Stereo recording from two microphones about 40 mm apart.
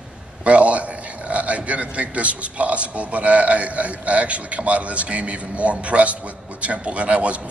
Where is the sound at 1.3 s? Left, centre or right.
Right.